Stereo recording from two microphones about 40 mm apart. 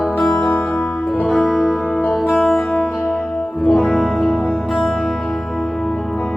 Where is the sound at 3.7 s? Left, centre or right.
Centre.